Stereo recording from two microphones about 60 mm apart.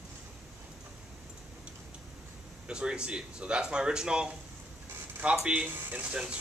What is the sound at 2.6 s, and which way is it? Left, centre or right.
A man's voice, centre.